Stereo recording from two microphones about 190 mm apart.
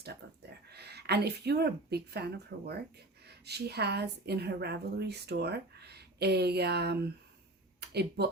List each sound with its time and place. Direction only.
0.7 s a woman's voice: 60° right (ahead or behind)